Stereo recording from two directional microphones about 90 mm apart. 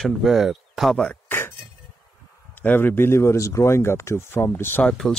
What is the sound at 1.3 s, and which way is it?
Chink, 25° left (ahead or behind).